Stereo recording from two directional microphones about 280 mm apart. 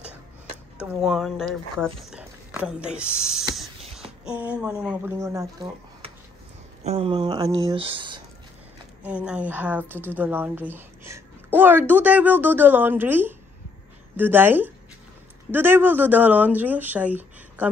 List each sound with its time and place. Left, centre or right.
0.8 s a woman's voice: centre
9.0 s a woman's voice: centre